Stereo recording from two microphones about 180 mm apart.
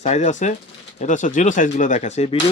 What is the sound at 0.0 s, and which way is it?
Speech, 40° left (ahead or behind).